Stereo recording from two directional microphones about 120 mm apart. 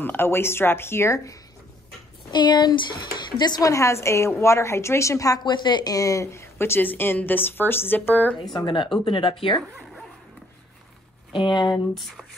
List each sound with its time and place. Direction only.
0.0 s speech: 20° left (ahead or behind)
2.3 s speech: 35° left (ahead or behind); by 8.4 s 15° left (ahead or behind)
8.5 s speech: 40° left (ahead or behind)
11.3 s speech: 40° left (ahead or behind)
11.9 s speech: centre (ahead or behind)